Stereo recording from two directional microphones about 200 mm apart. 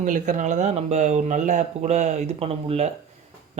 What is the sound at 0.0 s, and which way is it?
Speech, 40° right (ahead or behind).